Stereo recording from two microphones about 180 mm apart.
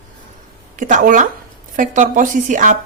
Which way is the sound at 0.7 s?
45° right (ahead or behind).